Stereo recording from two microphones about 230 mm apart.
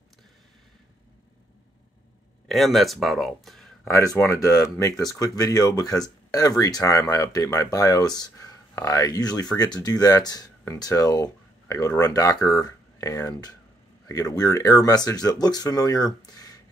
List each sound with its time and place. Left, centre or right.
2.4 s speech: centre
3.9 s speech: centre
16.3 s a sound: centre